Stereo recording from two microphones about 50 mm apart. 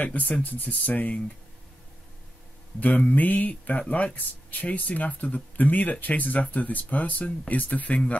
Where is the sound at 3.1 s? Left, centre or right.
Left.